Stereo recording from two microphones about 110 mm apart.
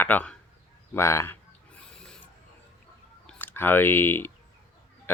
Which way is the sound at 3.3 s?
15° left (ahead or behind).